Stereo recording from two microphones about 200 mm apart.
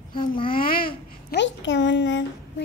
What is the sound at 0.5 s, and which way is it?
Babbling, 45° left (ahead or behind).